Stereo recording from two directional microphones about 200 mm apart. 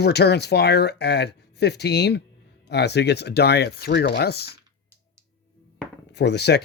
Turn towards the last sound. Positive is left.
turn(degrees=55)  # may be behind; listen again after turning